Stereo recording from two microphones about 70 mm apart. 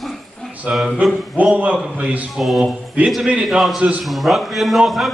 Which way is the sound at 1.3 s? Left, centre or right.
Centre.